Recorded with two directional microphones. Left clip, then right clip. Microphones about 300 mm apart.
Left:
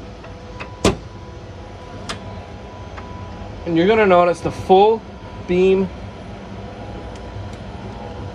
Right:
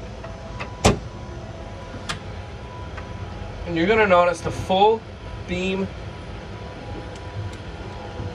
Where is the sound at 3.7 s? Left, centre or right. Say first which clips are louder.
Left 3 dB; left.